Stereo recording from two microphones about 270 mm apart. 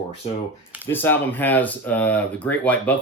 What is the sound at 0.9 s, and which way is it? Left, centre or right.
Speech, centre.